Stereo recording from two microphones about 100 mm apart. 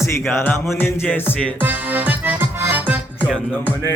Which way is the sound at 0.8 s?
20° left (ahead or behind).